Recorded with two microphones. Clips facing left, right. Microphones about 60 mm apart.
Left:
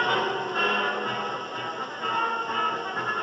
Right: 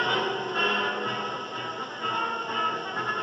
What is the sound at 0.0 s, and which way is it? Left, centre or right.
Music, centre.